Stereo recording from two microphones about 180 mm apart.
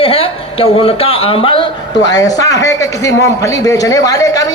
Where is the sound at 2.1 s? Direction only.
20° left (ahead or behind).